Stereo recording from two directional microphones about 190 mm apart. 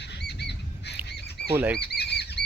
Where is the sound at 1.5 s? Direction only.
10° right (ahead or behind).